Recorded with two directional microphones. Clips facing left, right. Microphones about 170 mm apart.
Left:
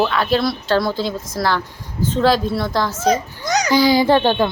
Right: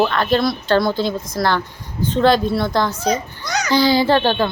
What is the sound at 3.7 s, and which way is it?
Speech, 10° left (ahead or behind).